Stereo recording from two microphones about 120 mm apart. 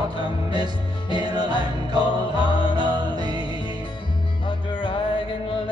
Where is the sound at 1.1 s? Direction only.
35° right (ahead or behind).